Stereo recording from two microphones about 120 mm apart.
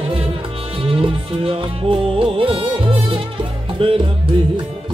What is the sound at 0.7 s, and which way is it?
Music, 50° right (ahead or behind).